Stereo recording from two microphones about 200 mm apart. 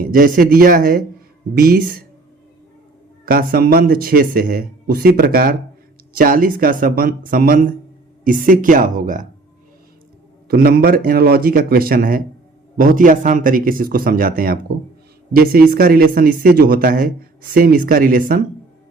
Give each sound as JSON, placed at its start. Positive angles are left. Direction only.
{"t": 0.0, "sound": "speech", "side_deg": -45}
{"t": 3.2, "sound": "speech", "side_deg": -45}
{"t": 10.5, "sound": "speech", "side_deg": -50}